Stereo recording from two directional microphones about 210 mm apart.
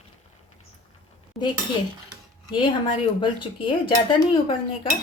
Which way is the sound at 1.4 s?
Centre (ahead or behind).